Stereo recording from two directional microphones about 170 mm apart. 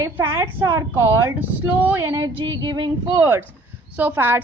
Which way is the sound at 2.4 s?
25° right (ahead or behind).